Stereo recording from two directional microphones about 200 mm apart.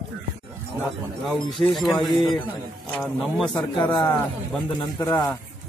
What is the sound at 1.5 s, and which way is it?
Speech, centre (ahead or behind).